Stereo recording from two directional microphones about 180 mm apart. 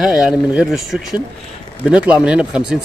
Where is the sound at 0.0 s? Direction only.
5° right (ahead or behind).